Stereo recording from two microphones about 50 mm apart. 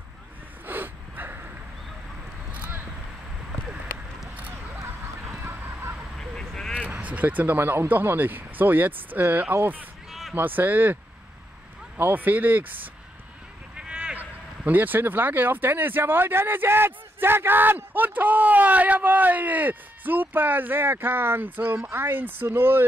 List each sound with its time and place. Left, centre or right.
0.7 s snort: right
6.1 s vehicle: centre
6.9 s speech: right
12.0 s speech: right
13.7 s a sound: centre
14.1 s speech: right